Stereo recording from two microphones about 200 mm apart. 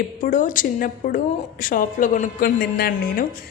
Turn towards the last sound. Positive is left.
turn(degrees=50)  # may be behind; listen again after turning